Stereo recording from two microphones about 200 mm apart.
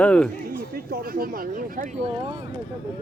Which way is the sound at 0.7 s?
50° right (ahead or behind).